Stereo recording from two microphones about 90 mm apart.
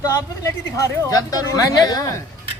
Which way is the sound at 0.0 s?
35° left (ahead or behind).